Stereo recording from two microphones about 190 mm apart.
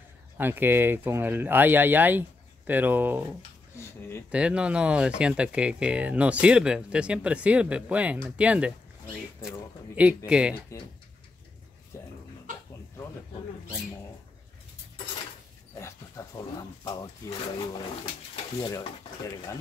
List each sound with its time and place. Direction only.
0.4 s speech: 10° right (ahead or behind)
3.7 s speech: 15° left (ahead or behind)
4.3 s speech: 5° right (ahead or behind)
9.9 s speech: 5° right (ahead or behind)
11.9 s dog: 15° left (ahead or behind)
15.8 s a sound: 20° left (ahead or behind)
18.3 s stir: 25° left (ahead or behind)